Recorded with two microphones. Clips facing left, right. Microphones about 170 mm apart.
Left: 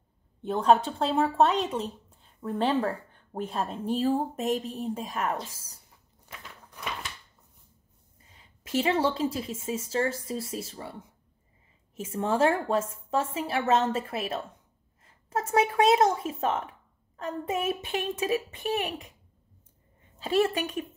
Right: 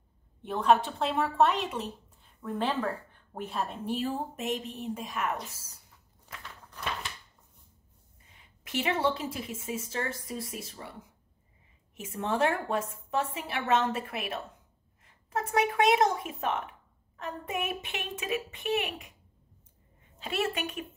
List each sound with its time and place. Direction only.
0.4 s a woman's voice: 30° left (ahead or behind)
3.9 s a woman's voice: 35° left (ahead or behind)
6.2 s biting: 15° left (ahead or behind)
8.6 s a woman's voice: 25° left (ahead or behind)
12.3 s a woman's voice: 30° left (ahead or behind)
20.2 s a woman's voice: 35° left (ahead or behind)